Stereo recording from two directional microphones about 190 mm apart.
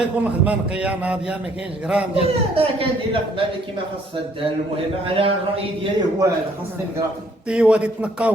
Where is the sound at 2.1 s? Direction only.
30° right (ahead or behind).